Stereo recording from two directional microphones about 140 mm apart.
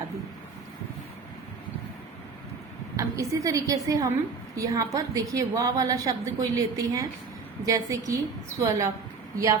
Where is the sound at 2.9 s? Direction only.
25° right (ahead or behind).